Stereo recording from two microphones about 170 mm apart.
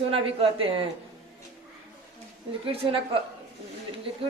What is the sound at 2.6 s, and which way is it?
Speech, 35° right (ahead or behind).